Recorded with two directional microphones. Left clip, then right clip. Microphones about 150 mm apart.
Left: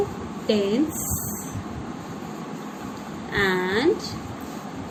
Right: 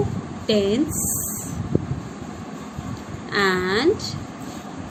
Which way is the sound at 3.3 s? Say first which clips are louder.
Right 2 dB; 45° right (ahead or behind).